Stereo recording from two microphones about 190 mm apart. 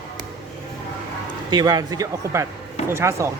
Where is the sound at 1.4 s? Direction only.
20° right (ahead or behind).